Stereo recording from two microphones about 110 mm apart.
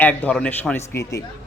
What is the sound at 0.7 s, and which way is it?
Speech, 20° left (ahead or behind).